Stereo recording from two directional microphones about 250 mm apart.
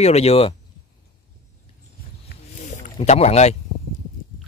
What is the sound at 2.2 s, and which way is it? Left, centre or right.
Wild animals, left.